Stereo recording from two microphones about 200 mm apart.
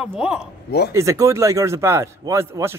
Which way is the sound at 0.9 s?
15° right (ahead or behind).